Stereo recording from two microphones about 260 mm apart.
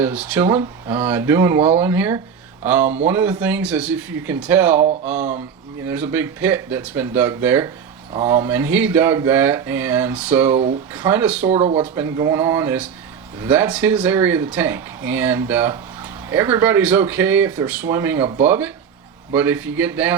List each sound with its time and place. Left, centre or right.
0.0 s speech: centre
11.5 s speech: right
11.8 s speech: centre